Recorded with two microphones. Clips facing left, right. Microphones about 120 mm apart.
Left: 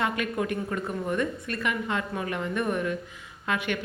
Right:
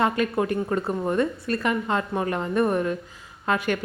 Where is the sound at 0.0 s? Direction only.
35° right (ahead or behind).